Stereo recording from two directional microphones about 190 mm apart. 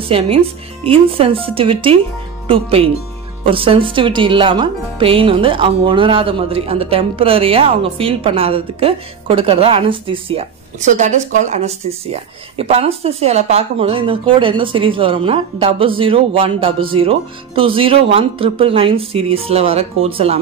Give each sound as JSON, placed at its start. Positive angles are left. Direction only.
{"t": 0.1, "sound": "speech", "side_deg": -30}